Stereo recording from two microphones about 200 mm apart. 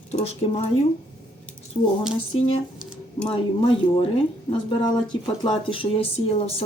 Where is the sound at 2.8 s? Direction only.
5° right (ahead or behind).